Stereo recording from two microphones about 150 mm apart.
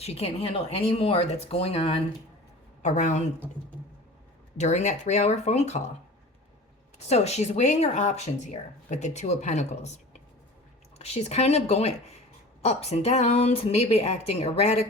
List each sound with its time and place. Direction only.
0.0 s speech: 40° left (ahead or behind)
4.5 s speech: 50° left (ahead or behind)
7.1 s speech: 45° left (ahead or behind)